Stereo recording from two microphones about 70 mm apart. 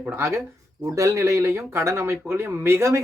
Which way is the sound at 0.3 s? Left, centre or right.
Right.